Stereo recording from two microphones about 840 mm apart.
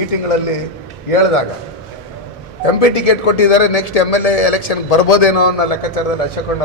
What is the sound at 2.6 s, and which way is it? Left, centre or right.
A man's voice, left.